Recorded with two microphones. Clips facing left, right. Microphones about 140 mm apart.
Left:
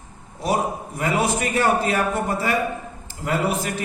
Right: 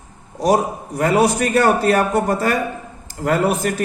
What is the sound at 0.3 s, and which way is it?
A man's voice, 40° right (ahead or behind).